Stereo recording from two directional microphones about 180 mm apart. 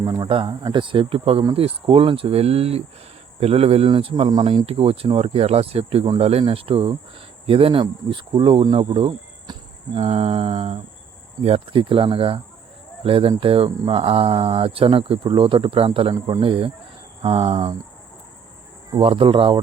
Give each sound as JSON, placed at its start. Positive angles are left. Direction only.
{"t": 0.0, "sound": "speech", "side_deg": -25}
{"t": 18.9, "sound": "speech", "side_deg": -30}